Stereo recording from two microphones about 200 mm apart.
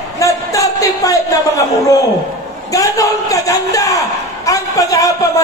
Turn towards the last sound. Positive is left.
turn(degrees=15)  # may be behind; listen again after turning